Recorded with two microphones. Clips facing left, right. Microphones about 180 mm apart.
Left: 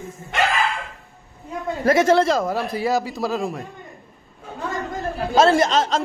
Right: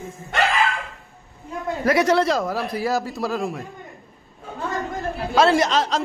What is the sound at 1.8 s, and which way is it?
Speech, 25° left (ahead or behind).